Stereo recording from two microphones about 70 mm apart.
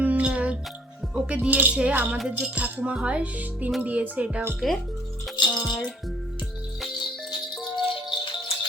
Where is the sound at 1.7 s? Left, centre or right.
Centre.